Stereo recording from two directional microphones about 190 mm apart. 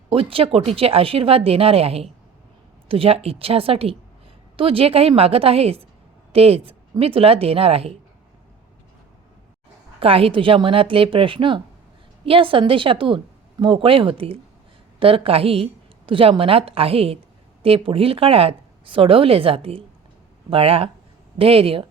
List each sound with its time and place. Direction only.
0.1 s a woman's voice: 30° right (ahead or behind)
10.0 s speech: 30° right (ahead or behind)